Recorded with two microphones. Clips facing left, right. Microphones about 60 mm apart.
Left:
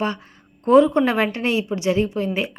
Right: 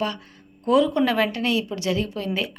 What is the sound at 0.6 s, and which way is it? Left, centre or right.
Speech, left.